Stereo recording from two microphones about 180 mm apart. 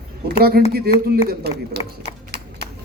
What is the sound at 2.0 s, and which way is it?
Horse, 65° right (ahead or behind).